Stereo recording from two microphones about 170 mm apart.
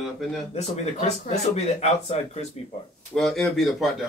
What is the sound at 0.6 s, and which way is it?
Speech, 40° left (ahead or behind).